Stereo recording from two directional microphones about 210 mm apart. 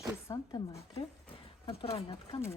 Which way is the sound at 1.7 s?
30° left (ahead or behind).